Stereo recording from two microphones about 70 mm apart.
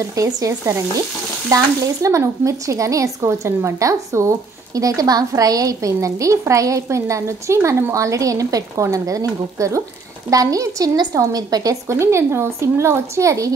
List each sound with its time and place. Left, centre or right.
0.0 s a woman's voice: right
11.9 s speech: right